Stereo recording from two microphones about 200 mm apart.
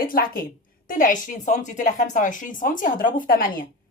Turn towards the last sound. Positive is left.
turn(degrees=45)  # may be behind; listen again after turning